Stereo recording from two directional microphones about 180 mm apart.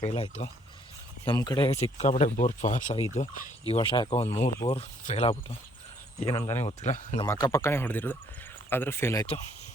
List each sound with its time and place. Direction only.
0.0 s speech: 30° left (ahead or behind)
1.7 s speech: 40° left (ahead or behind)
6.2 s speech: 20° left (ahead or behind)
6.7 s speech: 40° left (ahead or behind)
7.3 s speech: 20° left (ahead or behind)